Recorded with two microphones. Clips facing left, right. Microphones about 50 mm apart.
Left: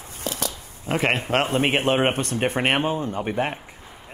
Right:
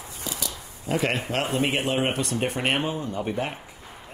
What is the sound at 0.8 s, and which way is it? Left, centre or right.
Speech, left.